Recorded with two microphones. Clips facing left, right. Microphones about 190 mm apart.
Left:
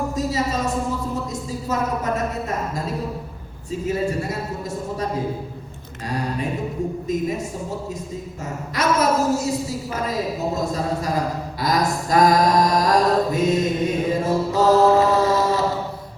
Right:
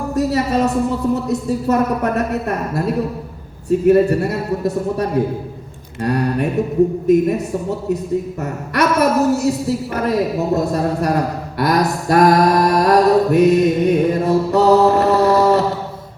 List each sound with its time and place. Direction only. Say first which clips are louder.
0.1 s a woman's voice: right 6 dB; 65° right (ahead or behind)